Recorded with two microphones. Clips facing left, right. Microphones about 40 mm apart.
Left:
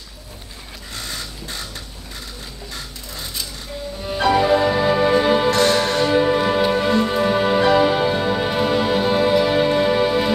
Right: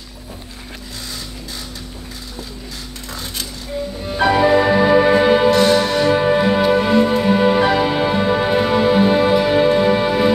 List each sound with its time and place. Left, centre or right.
4.2 s music: centre